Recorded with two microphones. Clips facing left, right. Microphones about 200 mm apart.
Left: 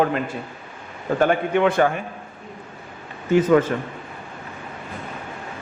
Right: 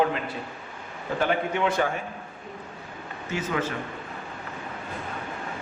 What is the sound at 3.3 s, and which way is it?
Speech, 50° left (ahead or behind).